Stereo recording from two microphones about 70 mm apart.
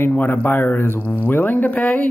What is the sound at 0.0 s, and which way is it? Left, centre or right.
Speech, left.